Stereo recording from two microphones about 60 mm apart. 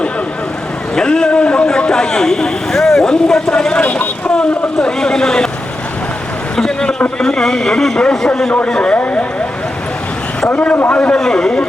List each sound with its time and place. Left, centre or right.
0.9 s a man's voice: centre
6.6 s a sound: centre
7.2 s a man's voice: centre
10.5 s a man's voice: centre
11.2 s a man's voice: centre